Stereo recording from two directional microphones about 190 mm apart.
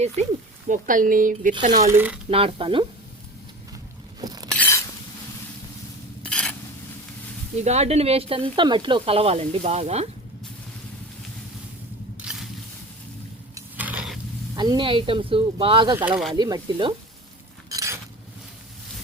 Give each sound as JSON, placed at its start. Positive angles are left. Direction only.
{"t": 0.7, "sound": "speech", "side_deg": -45}
{"t": 1.7, "sound": "speech", "side_deg": -15}
{"t": 2.3, "sound": "speech", "side_deg": -30}
{"t": 4.2, "sound": "glass", "side_deg": -20}
{"t": 4.5, "sound": "a sound", "side_deg": 10}
{"t": 6.2, "sound": "stir", "side_deg": 5}
{"t": 7.6, "sound": "speech", "side_deg": -35}
{"t": 12.2, "sound": "a sound", "side_deg": -5}
{"t": 13.7, "sound": "a sound", "side_deg": -5}
{"t": 14.5, "sound": "speech", "side_deg": -20}
{"t": 16.0, "sound": "speech", "side_deg": -5}
{"t": 16.3, "sound": "speech", "side_deg": -20}
{"t": 17.7, "sound": "a sound", "side_deg": -15}